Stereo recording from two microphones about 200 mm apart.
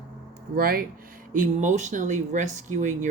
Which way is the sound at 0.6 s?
45° right (ahead or behind).